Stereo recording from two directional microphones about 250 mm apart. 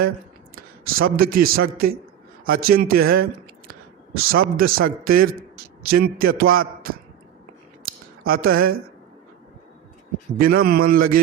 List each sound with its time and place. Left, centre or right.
0.5 s a man's voice: right
4.4 s a man's voice: right
8.2 s a man's voice: right
10.3 s a man's voice: right